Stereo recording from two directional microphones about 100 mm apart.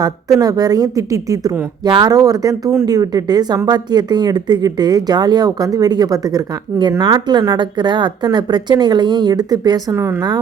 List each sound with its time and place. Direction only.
0.0 s speech: 35° right (ahead or behind)